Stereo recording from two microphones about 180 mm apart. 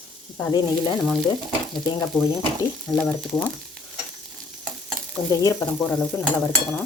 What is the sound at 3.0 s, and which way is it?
Frying, 5° right (ahead or behind).